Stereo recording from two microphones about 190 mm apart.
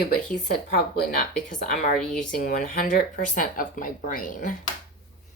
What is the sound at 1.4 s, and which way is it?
Speech, 45° left (ahead or behind).